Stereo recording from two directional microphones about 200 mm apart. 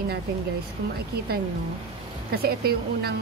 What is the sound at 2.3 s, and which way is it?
Speech, 50° right (ahead or behind).